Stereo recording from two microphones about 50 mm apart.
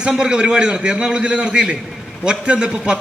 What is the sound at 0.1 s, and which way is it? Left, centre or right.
A man's voice, centre.